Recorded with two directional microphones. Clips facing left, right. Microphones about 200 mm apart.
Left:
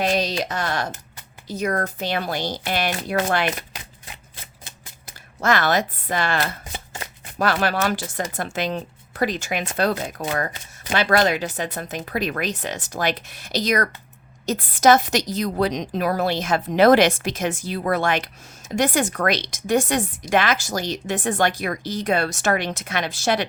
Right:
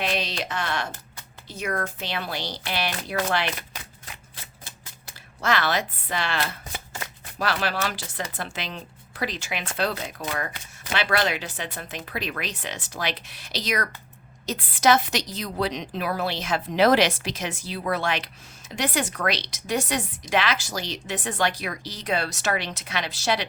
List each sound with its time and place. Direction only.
0.0 s speech: 40° left (ahead or behind)
5.4 s speech: 45° left (ahead or behind)